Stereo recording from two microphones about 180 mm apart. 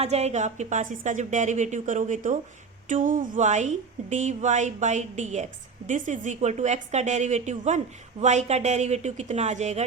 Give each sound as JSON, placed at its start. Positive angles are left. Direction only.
{"t": 0.0, "sound": "a woman's voice", "side_deg": -35}